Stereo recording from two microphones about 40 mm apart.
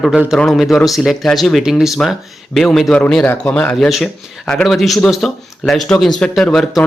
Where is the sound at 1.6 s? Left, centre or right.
Centre.